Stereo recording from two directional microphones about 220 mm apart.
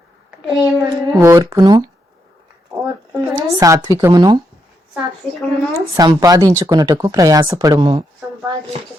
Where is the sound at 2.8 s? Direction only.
15° right (ahead or behind).